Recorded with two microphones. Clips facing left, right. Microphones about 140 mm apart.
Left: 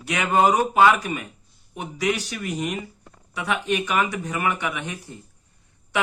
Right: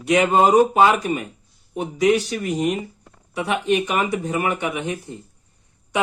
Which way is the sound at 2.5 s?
45° right (ahead or behind).